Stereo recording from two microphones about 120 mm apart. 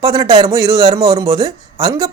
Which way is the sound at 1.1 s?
30° right (ahead or behind).